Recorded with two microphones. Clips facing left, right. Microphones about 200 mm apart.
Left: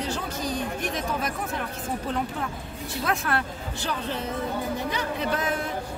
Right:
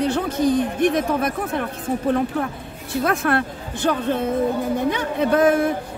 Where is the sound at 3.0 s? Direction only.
55° right (ahead or behind).